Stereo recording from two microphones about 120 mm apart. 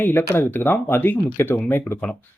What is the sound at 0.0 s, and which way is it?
Speech, 15° left (ahead or behind).